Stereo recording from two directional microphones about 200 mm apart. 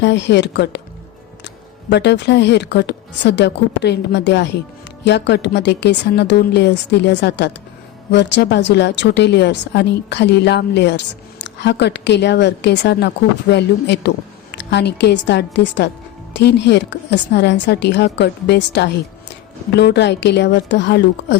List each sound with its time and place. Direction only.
0.0 s a woman's voice: 60° left (ahead or behind)
1.9 s a woman's voice: 60° left (ahead or behind)